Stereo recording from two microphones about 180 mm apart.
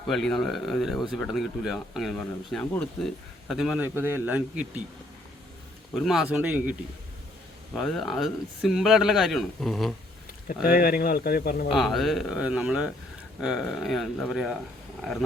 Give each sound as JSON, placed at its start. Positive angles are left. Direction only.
{"t": 0.1, "sound": "a man's voice", "side_deg": 0}
{"t": 5.9, "sound": "a man's voice", "side_deg": 0}
{"t": 7.8, "sound": "speech", "side_deg": 0}
{"t": 10.6, "sound": "speech", "side_deg": 55}
{"t": 11.7, "sound": "speech", "side_deg": 0}